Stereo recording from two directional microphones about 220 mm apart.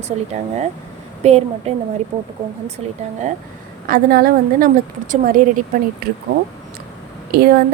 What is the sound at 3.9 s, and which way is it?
Speech, 45° right (ahead or behind).